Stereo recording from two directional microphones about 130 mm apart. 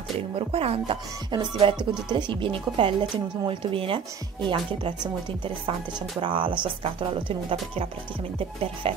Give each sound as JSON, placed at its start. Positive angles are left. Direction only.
{"t": 0.4, "sound": "speech", "side_deg": -50}
{"t": 8.8, "sound": "speech", "side_deg": -45}